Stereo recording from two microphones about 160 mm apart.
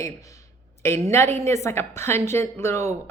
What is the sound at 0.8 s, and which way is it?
A woman's voice, 15° left (ahead or behind).